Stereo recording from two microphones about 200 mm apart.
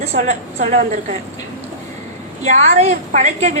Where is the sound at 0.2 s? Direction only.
35° right (ahead or behind).